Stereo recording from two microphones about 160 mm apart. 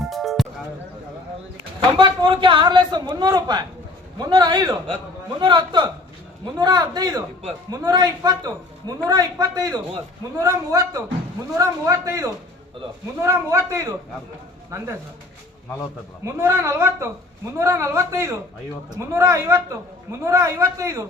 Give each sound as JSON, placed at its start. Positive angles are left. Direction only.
{"t": 0.1, "sound": "music", "side_deg": 0}
{"t": 2.0, "sound": "a man's voice", "side_deg": -30}
{"t": 16.2, "sound": "a woman's voice", "side_deg": -15}